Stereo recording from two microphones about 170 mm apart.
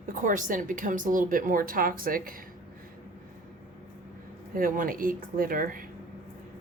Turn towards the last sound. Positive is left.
turn(degrees=-55)  # may be behind; listen again after turning